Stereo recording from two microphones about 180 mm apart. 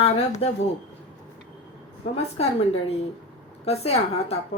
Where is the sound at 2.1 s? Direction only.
35° left (ahead or behind).